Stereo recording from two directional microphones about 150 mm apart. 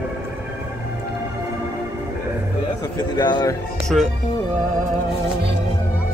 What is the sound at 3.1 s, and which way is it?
Speech, 25° left (ahead or behind).